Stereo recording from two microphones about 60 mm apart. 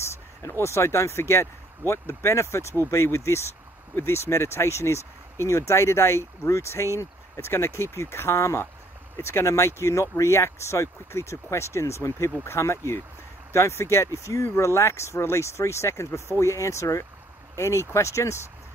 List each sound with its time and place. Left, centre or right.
0.6 s speech: left